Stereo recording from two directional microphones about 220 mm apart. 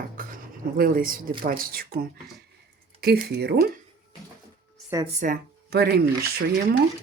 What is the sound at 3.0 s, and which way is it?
Speech, 45° right (ahead or behind).